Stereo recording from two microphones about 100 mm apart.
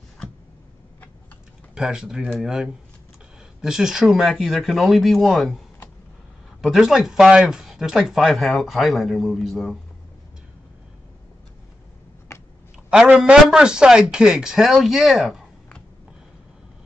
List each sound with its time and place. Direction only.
1.8 s speech: 5° right (ahead or behind)
6.6 s speech: centre (ahead or behind)
12.3 s a sound: 30° left (ahead or behind)
12.9 s speech: 5° right (ahead or behind)